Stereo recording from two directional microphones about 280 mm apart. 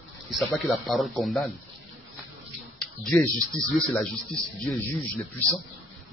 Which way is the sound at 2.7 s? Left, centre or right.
Centre.